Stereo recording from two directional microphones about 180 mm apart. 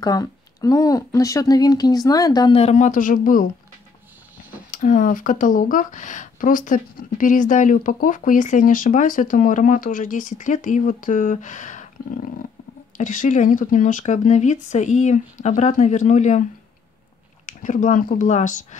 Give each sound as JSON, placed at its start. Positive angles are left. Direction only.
{"t": 0.0, "sound": "speech", "side_deg": 20}
{"t": 4.6, "sound": "speech", "side_deg": 45}
{"t": 12.9, "sound": "speech", "side_deg": 45}
{"t": 17.5, "sound": "speech", "side_deg": 45}